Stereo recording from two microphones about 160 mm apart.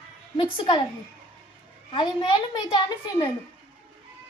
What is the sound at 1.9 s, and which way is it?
A woman's voice, 30° left (ahead or behind).